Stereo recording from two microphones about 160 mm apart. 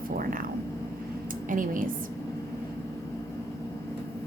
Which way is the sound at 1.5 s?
60° right (ahead or behind).